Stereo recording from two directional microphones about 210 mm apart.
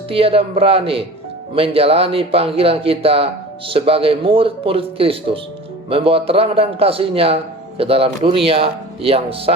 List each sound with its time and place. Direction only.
0.1 s a man's voice: 25° right (ahead or behind)